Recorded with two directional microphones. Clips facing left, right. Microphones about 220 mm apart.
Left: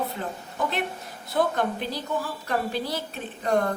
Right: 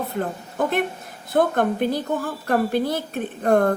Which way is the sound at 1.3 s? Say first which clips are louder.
Right 5 dB; 55° right (ahead or behind).